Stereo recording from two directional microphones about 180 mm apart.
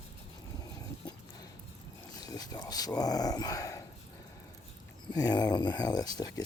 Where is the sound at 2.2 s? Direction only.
20° left (ahead or behind).